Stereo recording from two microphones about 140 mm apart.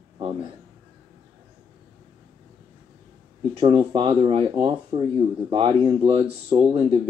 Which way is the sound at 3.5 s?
35° right (ahead or behind).